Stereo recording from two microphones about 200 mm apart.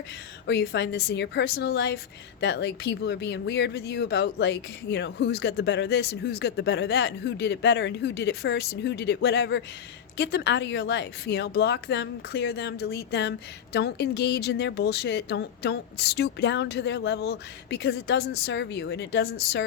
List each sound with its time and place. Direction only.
0.4 s speech: 60° left (ahead or behind)